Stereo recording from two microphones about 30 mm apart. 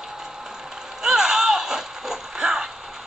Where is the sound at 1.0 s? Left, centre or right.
Centre.